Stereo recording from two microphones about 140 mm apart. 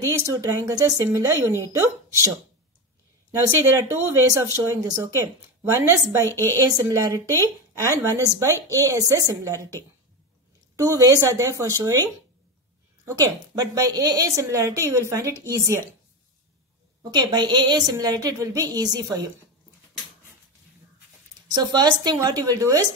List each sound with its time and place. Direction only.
0.2 s a woman's voice: 20° right (ahead or behind)
3.3 s a woman's voice: 20° right (ahead or behind)
6.2 s a woman's voice: 15° left (ahead or behind)
6.8 s a woman's voice: 20° right (ahead or behind)
10.8 s a woman's voice: 25° right (ahead or behind)
17.1 s a woman's voice: 30° right (ahead or behind)
21.5 s a woman's voice: 30° right (ahead or behind)